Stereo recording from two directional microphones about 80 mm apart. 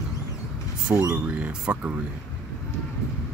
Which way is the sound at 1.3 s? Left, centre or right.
Centre.